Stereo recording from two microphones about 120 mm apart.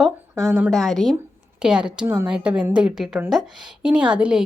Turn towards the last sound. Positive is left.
turn(degrees=-5)  # may be behind; listen again after turning